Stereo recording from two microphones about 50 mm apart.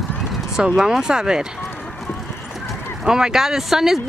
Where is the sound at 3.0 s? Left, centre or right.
Centre.